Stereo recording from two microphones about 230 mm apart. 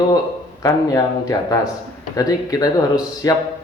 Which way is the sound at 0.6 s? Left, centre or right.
Centre.